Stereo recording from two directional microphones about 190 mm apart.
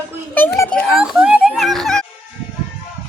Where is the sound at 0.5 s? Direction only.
10° left (ahead or behind).